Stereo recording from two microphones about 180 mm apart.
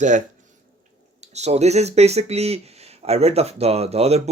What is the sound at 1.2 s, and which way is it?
Speech, 40° right (ahead or behind).